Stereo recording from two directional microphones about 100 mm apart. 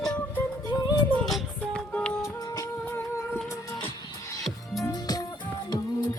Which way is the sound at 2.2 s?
35° left (ahead or behind).